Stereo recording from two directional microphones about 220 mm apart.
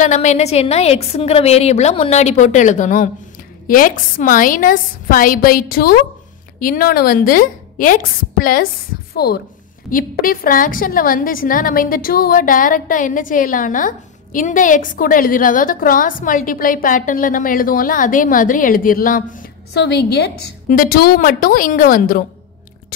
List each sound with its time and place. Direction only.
0.0 s a woman's voice: 30° left (ahead or behind)